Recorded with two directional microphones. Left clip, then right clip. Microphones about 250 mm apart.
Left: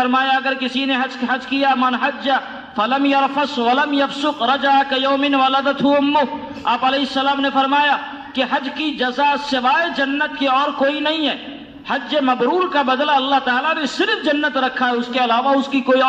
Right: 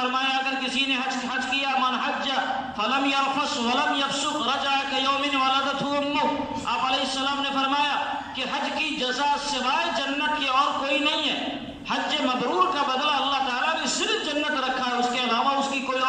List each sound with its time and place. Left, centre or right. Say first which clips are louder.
0.1 s a man's voice: left 8 dB; left
9.0 s a man's voice: left 9 dB; left